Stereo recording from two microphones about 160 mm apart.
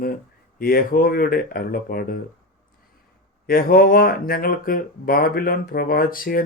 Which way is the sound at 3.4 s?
65° left (ahead or behind).